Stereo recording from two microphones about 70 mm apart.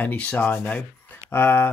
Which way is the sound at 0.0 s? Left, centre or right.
Left.